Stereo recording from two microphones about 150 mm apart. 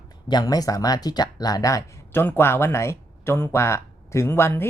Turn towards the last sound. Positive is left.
turn(degrees=15)  # may be behind; listen again after turning